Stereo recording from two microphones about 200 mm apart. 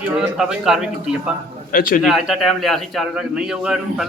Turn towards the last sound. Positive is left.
turn(degrees=-5)  # may be behind; listen again after turning